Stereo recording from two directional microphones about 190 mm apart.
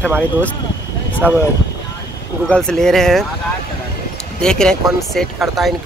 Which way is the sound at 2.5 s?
5° left (ahead or behind).